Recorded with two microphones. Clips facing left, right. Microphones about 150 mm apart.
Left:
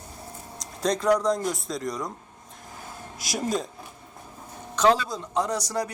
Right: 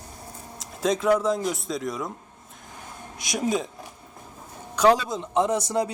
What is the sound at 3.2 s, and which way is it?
Speech, centre (ahead or behind).